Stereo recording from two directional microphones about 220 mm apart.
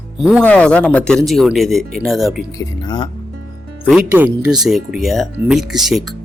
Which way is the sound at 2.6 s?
20° left (ahead or behind).